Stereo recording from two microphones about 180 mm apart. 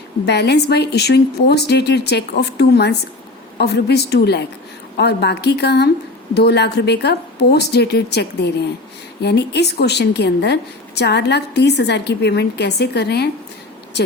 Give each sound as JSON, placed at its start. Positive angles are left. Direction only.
{"t": 0.3, "sound": "a woman's voice", "side_deg": 65}